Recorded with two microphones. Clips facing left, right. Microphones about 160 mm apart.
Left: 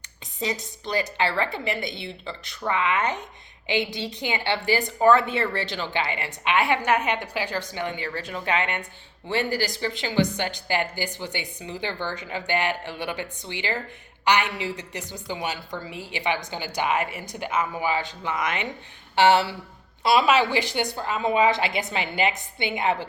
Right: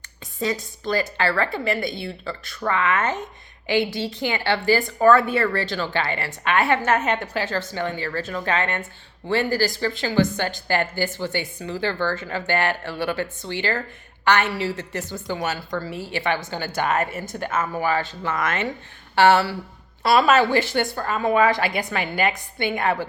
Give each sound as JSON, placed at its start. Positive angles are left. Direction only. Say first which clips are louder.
{"t": 0.3, "sound": "a woman's voice", "louder": "right 4 dB", "side_deg": 20}
{"t": 20.1, "sound": "a woman's voice", "louder": "right 3 dB", "side_deg": -45}
{"t": 20.6, "sound": "a woman's voice", "louder": "right 4 dB", "side_deg": 15}
{"t": 20.9, "sound": "a woman's voice", "louder": "right 2 dB", "side_deg": -50}
{"t": 21.4, "sound": "speech", "louder": "right 2 dB", "side_deg": 20}